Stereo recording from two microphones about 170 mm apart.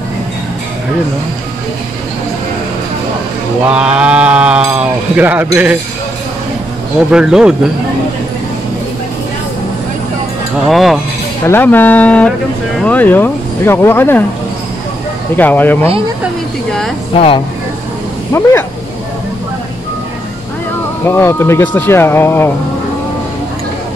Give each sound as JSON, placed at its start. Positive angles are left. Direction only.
{"t": 3.6, "sound": "speech", "side_deg": -5}
{"t": 7.1, "sound": "speech", "side_deg": -5}
{"t": 10.7, "sound": "speech", "side_deg": 0}
{"t": 11.4, "sound": "speech", "side_deg": 10}
{"t": 15.3, "sound": "speech", "side_deg": 10}
{"t": 17.1, "sound": "speech", "side_deg": 35}
{"t": 18.3, "sound": "speech", "side_deg": 15}
{"t": 21.1, "sound": "speech", "side_deg": 15}